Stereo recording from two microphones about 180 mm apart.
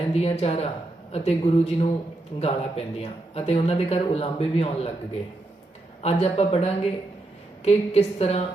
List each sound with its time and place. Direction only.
0.1 s speech: 35° left (ahead or behind)
6.0 s speech: 35° left (ahead or behind)